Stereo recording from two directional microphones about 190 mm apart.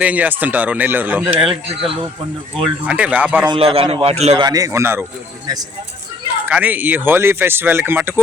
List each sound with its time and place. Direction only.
0.0 s speech: 10° right (ahead or behind)
2.8 s speech: 5° right (ahead or behind)
3.5 s a man's voice: 30° right (ahead or behind)
4.4 s speech: 20° right (ahead or behind)
6.5 s speech: 10° right (ahead or behind)